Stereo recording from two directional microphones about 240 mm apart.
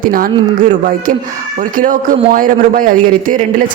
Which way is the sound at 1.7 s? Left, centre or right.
Right.